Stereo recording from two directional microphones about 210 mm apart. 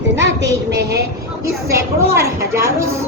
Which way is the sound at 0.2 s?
55° right (ahead or behind).